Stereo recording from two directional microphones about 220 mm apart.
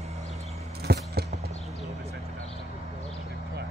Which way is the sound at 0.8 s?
50° right (ahead or behind).